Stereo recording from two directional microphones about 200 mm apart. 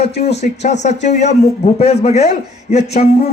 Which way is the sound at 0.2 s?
35° left (ahead or behind).